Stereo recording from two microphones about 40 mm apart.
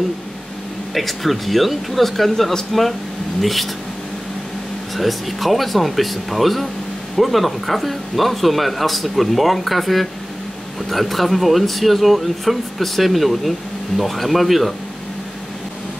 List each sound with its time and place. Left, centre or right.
0.9 s speech: centre
4.9 s speech: centre